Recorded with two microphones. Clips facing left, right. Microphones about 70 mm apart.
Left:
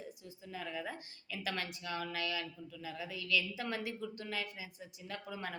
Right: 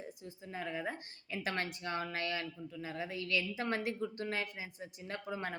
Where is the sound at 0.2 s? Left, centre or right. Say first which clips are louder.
Right 2 dB; right.